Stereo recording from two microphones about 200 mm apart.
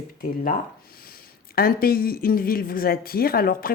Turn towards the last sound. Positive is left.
turn(degrees=45)  # may be behind; listen again after turning